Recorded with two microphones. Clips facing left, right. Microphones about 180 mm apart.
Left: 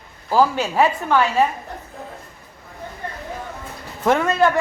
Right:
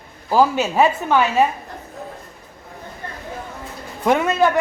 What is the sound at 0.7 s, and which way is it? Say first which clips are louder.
Speech: right 1 dB; 10° right (ahead or behind).